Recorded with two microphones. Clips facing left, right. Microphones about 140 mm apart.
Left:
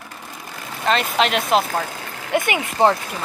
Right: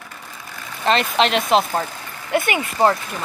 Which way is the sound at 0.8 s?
Centre (ahead or behind).